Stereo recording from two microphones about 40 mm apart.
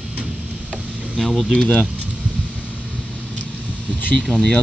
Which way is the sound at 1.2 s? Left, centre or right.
Centre.